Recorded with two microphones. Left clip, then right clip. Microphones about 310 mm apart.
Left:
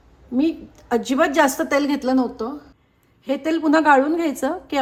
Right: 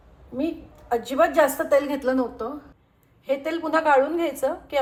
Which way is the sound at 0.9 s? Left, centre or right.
Left.